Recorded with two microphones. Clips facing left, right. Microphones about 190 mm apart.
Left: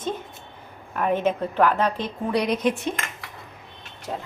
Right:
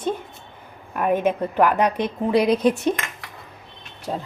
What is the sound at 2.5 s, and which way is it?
Speech, 35° right (ahead or behind).